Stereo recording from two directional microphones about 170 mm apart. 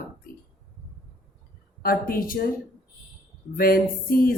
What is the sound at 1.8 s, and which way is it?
Speech, 60° left (ahead or behind).